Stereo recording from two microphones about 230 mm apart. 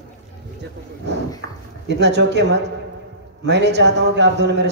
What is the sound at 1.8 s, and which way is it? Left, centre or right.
A man's voice, right.